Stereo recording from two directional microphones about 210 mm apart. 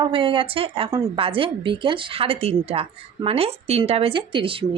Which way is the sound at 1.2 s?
25° right (ahead or behind).